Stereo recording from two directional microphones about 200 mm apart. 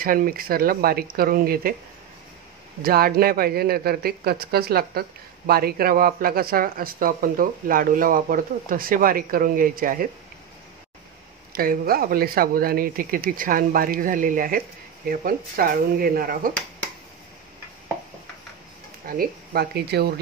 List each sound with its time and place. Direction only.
0.0 s speech: 45° right (ahead or behind)
2.8 s speech: 50° right (ahead or behind)
11.5 s speech: 45° right (ahead or behind)
19.0 s speech: 50° right (ahead or behind)